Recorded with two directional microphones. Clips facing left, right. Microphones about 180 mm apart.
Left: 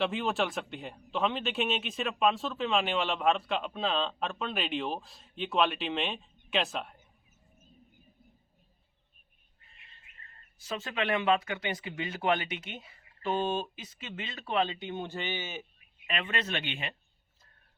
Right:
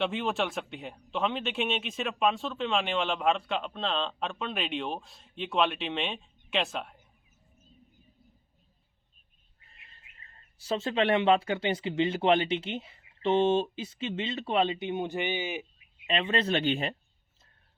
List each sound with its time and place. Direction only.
0.0 s a man's voice: centre (ahead or behind)
9.6 s bird: 40° right (ahead or behind)
10.6 s speech: 30° right (ahead or behind)
16.0 s speech: 25° right (ahead or behind)